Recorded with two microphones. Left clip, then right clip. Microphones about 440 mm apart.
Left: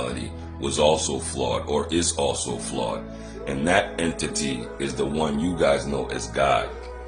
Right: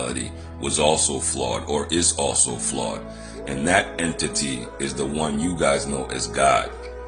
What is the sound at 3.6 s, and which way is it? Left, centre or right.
Speech, left.